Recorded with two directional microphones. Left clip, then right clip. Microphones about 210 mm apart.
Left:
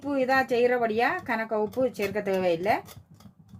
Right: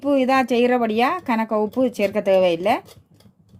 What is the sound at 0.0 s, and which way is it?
Speech, 40° right (ahead or behind).